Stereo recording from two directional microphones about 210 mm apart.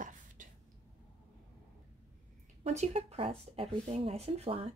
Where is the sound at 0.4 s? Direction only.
40° right (ahead or behind).